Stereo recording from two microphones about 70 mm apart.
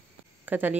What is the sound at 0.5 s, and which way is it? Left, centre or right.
Speech, right.